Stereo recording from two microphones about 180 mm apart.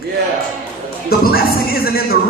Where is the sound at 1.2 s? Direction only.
55° left (ahead or behind).